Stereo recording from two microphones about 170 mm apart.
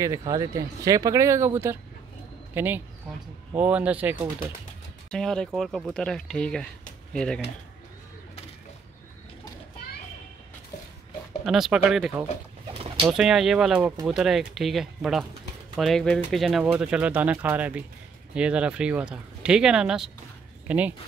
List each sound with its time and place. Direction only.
0.0 s speech: 20° right (ahead or behind)
5.1 s speech: 5° left (ahead or behind)
11.4 s speech: centre (ahead or behind)